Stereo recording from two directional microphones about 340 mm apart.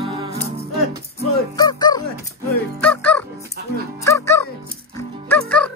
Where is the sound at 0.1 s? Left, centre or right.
Centre.